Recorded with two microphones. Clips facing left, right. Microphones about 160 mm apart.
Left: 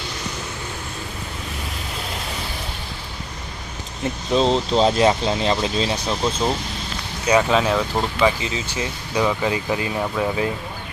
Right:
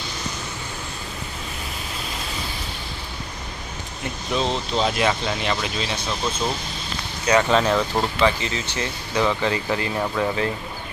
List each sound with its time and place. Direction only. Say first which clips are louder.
4.3 s speech: left 6 dB; 30° left (ahead or behind)
7.4 s speech: even; 5° left (ahead or behind)